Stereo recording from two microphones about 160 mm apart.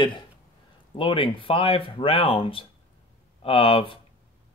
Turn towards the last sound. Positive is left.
turn(degrees=35)  # may be behind; listen again after turning